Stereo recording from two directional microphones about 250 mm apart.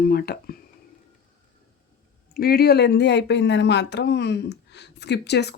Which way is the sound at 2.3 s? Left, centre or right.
Left.